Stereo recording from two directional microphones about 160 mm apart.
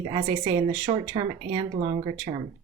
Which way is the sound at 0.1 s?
30° right (ahead or behind).